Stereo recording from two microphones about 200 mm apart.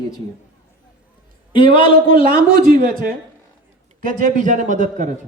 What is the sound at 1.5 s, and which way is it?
Speech, 25° left (ahead or behind).